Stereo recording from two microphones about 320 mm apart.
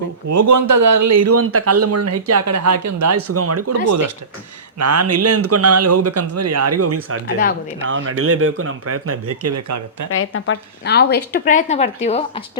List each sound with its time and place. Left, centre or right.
0.3 s speech: right
10.1 s a woman's voice: left; by 12.4 s centre